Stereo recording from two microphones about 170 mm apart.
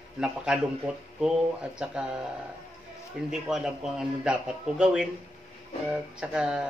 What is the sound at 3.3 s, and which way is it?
A man's voice, 5° right (ahead or behind).